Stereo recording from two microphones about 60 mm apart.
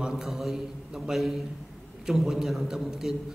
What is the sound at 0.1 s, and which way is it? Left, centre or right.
A man's voice, centre.